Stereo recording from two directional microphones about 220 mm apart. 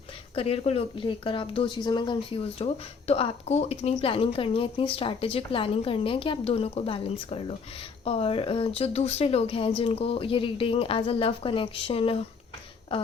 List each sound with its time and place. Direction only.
0.3 s a woman's voice: 25° left (ahead or behind)